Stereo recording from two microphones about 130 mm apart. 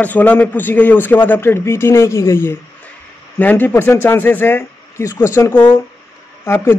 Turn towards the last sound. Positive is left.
turn(degrees=20)  # may be behind; listen again after turning